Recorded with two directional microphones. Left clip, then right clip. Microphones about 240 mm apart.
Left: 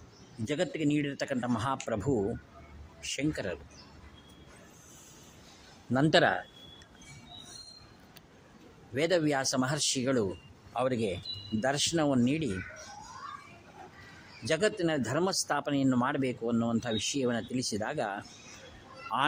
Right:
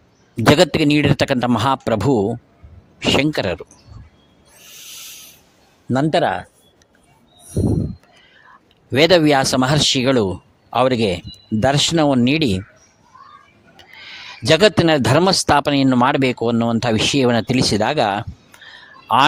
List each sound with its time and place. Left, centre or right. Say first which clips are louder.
0.5 s speech: right 15 dB; right
5.9 s speech: right 8 dB; right
8.9 s speech: right 16 dB; right
14.4 s speech: right 16 dB; right